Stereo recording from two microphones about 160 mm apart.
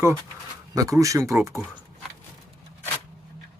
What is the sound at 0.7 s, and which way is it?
Speech, 20° right (ahead or behind).